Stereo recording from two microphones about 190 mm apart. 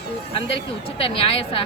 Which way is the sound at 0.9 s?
30° left (ahead or behind).